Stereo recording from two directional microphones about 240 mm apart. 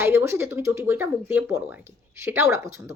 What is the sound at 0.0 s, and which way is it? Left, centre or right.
Speech, centre.